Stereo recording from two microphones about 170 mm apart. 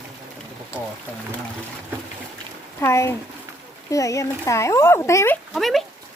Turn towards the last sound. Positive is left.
turn(degrees=0)  # may be behind; listen again after turning